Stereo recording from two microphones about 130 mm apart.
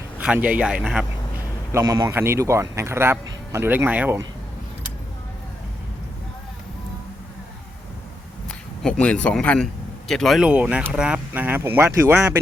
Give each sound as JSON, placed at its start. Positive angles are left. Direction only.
{"t": 0.2, "sound": "speech", "side_deg": -10}
{"t": 1.7, "sound": "speech", "side_deg": -30}
{"t": 8.4, "sound": "speech", "side_deg": 5}